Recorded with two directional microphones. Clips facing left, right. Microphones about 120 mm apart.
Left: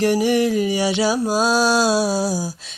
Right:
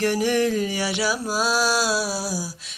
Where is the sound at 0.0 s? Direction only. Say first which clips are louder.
Left 4 dB; 15° left (ahead or behind).